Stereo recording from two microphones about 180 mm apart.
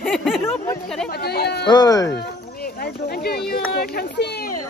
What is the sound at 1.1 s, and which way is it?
Speech, 60° left (ahead or behind).